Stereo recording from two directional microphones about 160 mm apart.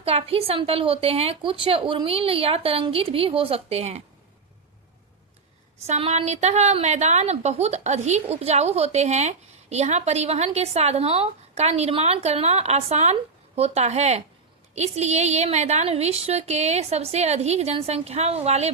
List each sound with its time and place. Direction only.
0.0 s a woman's voice: 40° right (ahead or behind)
5.8 s a woman's voice: 40° right (ahead or behind)